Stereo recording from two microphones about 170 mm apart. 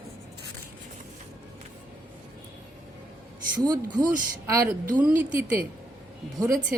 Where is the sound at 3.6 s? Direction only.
25° right (ahead or behind).